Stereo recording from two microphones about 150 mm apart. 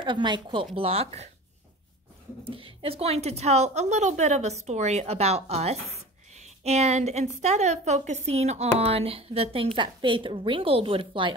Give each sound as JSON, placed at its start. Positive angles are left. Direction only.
{"t": 0.0, "sound": "speech", "side_deg": -30}
{"t": 2.4, "sound": "speech", "side_deg": -35}